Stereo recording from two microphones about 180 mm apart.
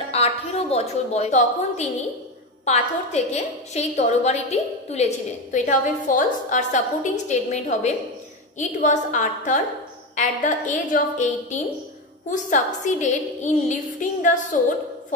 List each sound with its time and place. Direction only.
0.1 s a woman's voice: 35° left (ahead or behind)
12.3 s a woman's voice: 45° left (ahead or behind)